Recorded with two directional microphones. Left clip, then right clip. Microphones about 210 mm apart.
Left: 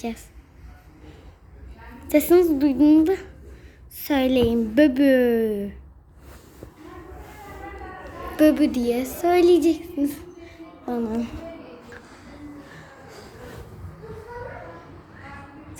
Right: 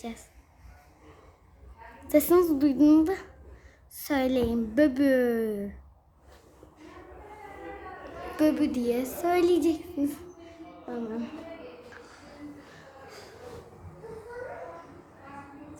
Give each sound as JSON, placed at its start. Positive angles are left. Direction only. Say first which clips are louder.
{"t": 2.0, "sound": "a woman's voice", "louder": "left 5 dB", "side_deg": 0}
{"t": 8.4, "sound": "a woman's voice", "louder": "left 7 dB", "side_deg": 15}
{"t": 10.8, "sound": "a woman's voice", "louder": "left 8 dB", "side_deg": 25}